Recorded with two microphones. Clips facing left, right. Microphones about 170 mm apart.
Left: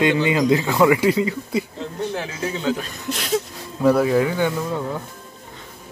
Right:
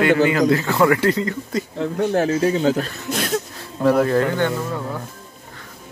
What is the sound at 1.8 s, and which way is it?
Speech, 55° right (ahead or behind).